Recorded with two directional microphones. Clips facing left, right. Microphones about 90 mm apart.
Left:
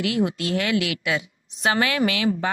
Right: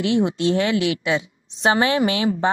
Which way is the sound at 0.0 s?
25° right (ahead or behind).